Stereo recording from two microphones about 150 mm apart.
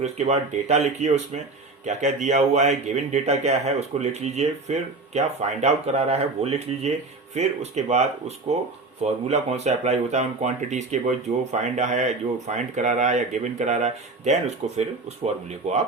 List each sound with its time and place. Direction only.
0.0 s speech: 50° right (ahead or behind)